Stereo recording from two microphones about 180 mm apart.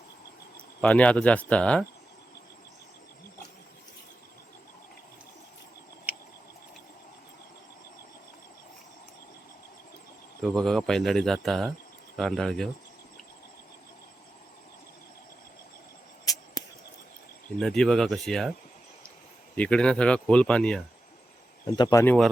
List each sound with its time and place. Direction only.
0.8 s speech: 5° left (ahead or behind)
10.5 s speech: 5° left (ahead or behind)
16.2 s arrow: 20° left (ahead or behind)
17.6 s speech: centre (ahead or behind)
19.5 s speech: 5° left (ahead or behind)
21.7 s speech: 20° left (ahead or behind)